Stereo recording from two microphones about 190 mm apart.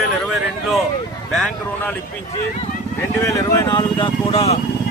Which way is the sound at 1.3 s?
5° left (ahead or behind).